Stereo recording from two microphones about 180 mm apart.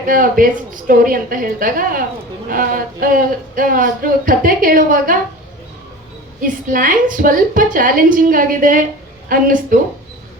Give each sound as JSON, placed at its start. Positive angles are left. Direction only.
{"t": 0.0, "sound": "speech", "side_deg": -50}
{"t": 6.4, "sound": "speech", "side_deg": -50}